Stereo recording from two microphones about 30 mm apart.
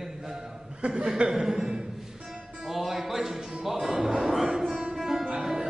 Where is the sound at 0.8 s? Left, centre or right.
Right.